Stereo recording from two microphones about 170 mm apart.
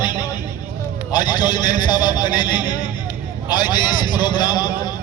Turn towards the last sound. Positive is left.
turn(degrees=25)  # may be behind; listen again after turning